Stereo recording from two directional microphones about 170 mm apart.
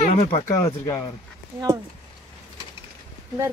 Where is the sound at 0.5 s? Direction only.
15° left (ahead or behind).